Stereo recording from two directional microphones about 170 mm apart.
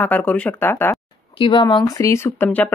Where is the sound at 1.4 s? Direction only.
30° left (ahead or behind); by 2.7 s 10° left (ahead or behind).